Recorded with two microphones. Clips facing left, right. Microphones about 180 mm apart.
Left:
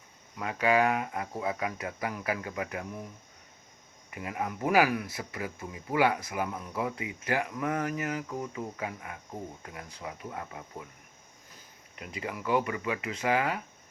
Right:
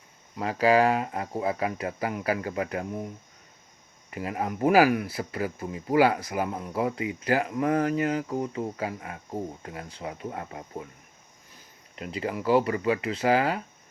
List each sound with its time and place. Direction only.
0.3 s speech: 35° right (ahead or behind)
4.1 s speech: 35° right (ahead or behind)
11.9 s speech: 30° right (ahead or behind)